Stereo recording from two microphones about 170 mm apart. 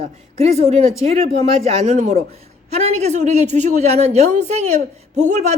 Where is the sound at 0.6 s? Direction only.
40° right (ahead or behind).